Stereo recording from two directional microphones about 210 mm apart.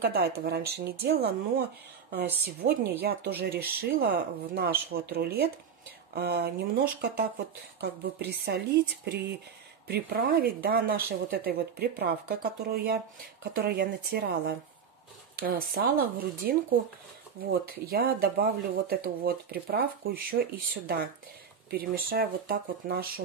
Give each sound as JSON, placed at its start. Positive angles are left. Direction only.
{"t": 0.0, "sound": "speech", "side_deg": -50}
{"t": 2.2, "sound": "a woman's voice", "side_deg": -10}
{"t": 2.6, "sound": "speech", "side_deg": -50}